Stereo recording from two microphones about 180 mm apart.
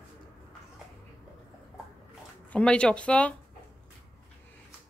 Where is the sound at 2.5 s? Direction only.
5° left (ahead or behind).